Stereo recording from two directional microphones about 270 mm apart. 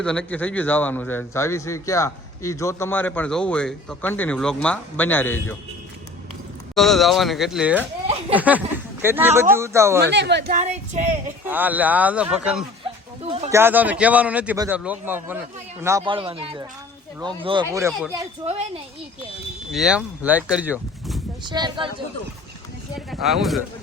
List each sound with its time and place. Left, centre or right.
0.0 s a man's voice: centre
6.7 s a man's voice: centre
10.1 s a woman's voice: right
10.6 s speech: right
11.4 s a man's voice: centre
13.2 s speech: right
13.5 s a man's voice: centre
18.4 s speech: right
19.7 s a man's voice: centre
21.4 s speech: centre
23.0 s a man's voice: centre